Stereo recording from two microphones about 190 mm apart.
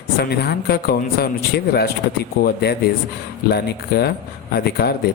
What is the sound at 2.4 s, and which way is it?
Speech, 55° left (ahead or behind).